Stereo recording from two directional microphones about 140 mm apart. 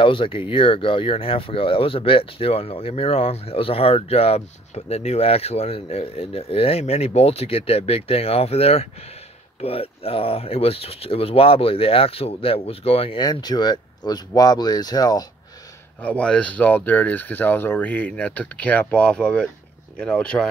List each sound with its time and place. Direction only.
0.0 s speech: 40° left (ahead or behind)
13.2 s speech: 30° left (ahead or behind)
16.0 s speech: 10° left (ahead or behind)